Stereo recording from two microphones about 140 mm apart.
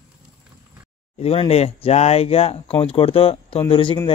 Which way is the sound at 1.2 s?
45° left (ahead or behind).